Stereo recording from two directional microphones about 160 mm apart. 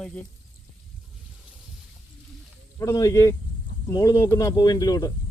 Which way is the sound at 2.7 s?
20° left (ahead or behind).